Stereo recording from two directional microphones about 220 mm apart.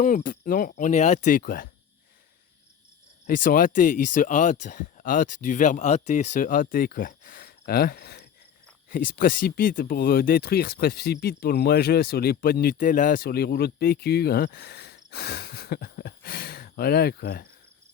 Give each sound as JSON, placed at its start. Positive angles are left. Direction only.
{"t": 0.0, "sound": "speech", "side_deg": 35}
{"t": 3.2, "sound": "speech", "side_deg": 40}